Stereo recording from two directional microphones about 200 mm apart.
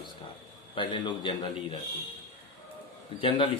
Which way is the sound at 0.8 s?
25° left (ahead or behind).